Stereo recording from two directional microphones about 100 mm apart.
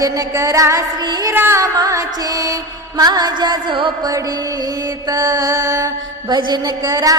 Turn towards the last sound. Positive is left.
turn(degrees=-35)  # may be behind; listen again after turning